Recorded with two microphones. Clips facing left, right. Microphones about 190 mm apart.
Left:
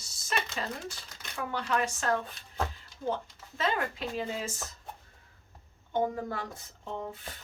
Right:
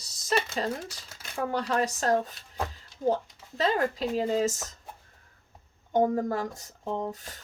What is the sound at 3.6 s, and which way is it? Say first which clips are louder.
Speech: right 5 dB; 35° right (ahead or behind).